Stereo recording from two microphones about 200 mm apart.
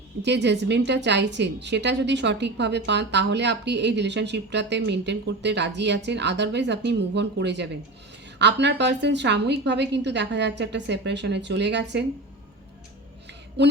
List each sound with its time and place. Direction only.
0.2 s a woman's voice: 60° right (ahead or behind)
13.6 s a woman's voice: 60° right (ahead or behind)